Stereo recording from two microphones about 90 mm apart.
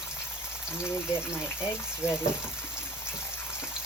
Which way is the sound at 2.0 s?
30° left (ahead or behind).